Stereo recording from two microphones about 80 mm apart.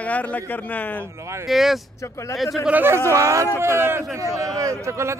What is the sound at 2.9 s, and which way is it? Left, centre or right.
A man's voice, right.